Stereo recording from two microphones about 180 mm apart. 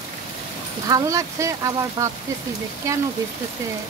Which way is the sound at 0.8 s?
20° right (ahead or behind).